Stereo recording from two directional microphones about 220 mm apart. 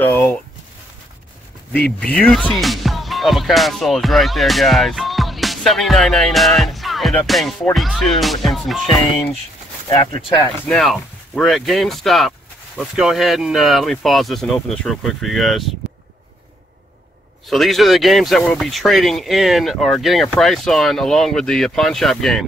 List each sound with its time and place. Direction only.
0.0 s speech: 10° left (ahead or behind)
1.7 s speech: 5° left (ahead or behind)
9.8 s speech: 20° left (ahead or behind)
10.6 s speech: 5° left (ahead or behind)
17.5 s speech: centre (ahead or behind)